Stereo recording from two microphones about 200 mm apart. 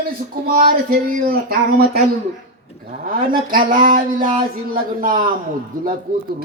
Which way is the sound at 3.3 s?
45° right (ahead or behind).